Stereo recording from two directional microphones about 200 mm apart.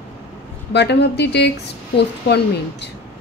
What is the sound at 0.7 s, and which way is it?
Speech, 55° left (ahead or behind).